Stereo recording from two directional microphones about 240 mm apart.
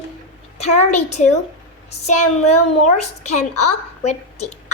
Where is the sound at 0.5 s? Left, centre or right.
Left.